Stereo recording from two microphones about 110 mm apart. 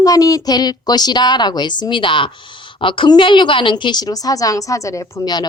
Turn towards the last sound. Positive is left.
turn(degrees=40)  # may be behind; listen again after turning